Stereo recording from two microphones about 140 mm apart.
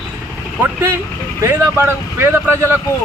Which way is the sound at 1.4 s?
20° right (ahead or behind).